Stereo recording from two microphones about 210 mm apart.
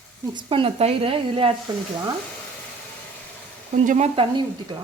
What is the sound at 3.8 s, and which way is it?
Speech, 30° right (ahead or behind).